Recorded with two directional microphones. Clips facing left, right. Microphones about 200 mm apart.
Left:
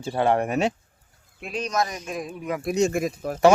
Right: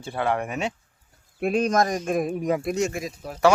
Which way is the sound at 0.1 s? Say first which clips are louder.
Left 4 dB; 30° left (ahead or behind).